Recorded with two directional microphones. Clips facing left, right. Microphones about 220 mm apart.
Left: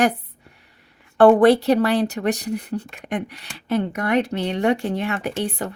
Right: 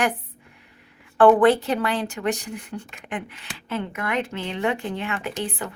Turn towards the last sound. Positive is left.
turn(degrees=40)  # may be behind; listen again after turning